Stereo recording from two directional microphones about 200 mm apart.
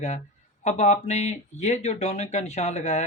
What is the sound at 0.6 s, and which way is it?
Speech, 35° left (ahead or behind).